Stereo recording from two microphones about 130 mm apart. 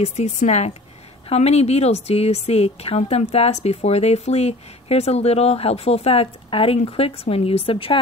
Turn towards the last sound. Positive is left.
turn(degrees=45)  # may be behind; listen again after turning